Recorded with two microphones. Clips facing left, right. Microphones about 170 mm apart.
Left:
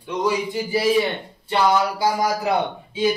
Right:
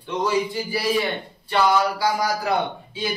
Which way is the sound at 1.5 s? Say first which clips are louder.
Left 1 dB; 25° left (ahead or behind).